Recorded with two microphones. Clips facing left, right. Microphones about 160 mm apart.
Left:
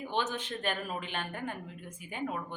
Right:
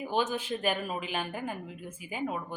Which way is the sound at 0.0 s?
10° right (ahead or behind).